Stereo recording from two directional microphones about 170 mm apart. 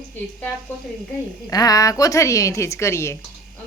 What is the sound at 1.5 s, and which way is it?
A woman's voice, 20° left (ahead or behind).